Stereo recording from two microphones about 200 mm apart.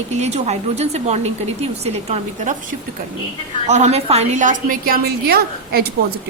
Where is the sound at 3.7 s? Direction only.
35° right (ahead or behind); by 5.9 s 50° right (ahead or behind).